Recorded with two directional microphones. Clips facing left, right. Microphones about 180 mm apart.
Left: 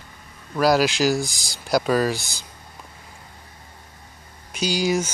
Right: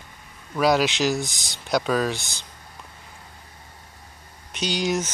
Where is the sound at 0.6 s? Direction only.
Centre (ahead or behind).